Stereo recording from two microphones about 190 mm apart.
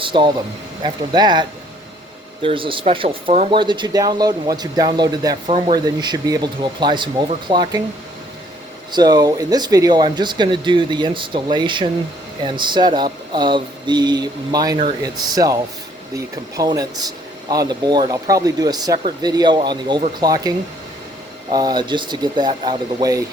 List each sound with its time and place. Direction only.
0.0 s speech: 25° right (ahead or behind)
8.9 s speech: 20° right (ahead or behind)
21.5 s speech: 20° right (ahead or behind)